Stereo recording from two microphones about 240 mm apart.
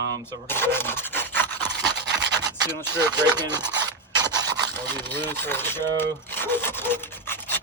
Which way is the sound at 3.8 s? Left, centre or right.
Centre.